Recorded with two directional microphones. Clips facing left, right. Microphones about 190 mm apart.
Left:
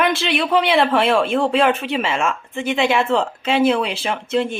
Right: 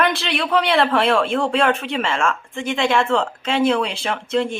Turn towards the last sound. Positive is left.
turn(degrees=5)  # may be behind; listen again after turning